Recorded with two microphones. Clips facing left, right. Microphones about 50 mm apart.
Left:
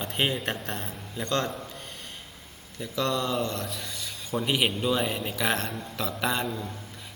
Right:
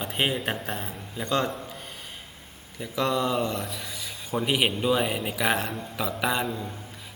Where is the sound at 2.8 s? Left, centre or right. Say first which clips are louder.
Right 2 dB; centre.